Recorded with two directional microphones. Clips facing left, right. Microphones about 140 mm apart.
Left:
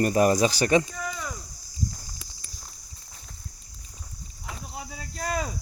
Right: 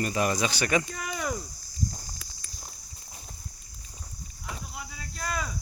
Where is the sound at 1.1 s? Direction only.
75° right (ahead or behind).